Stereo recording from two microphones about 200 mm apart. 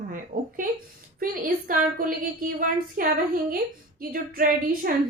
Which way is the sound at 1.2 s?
45° right (ahead or behind).